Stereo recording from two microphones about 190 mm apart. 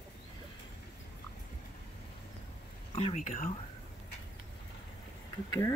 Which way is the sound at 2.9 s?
30° left (ahead or behind).